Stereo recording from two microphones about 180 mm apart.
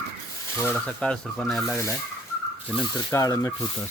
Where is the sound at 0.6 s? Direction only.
10° left (ahead or behind).